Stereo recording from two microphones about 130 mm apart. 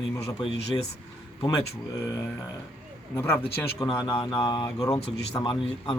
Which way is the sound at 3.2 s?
15° left (ahead or behind).